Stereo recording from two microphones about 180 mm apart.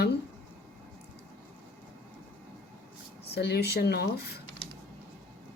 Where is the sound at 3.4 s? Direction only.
65° left (ahead or behind).